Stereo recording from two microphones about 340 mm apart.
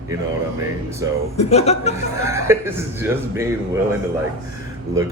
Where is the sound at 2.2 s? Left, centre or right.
Centre.